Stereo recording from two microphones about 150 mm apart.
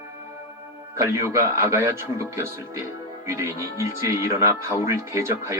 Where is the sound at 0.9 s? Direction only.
20° right (ahead or behind).